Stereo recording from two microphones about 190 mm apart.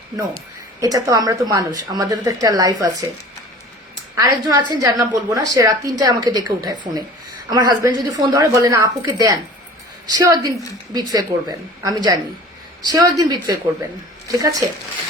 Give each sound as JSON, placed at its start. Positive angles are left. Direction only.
{"t": 0.8, "sound": "a woman's voice", "side_deg": -20}
{"t": 4.2, "sound": "a woman's voice", "side_deg": -20}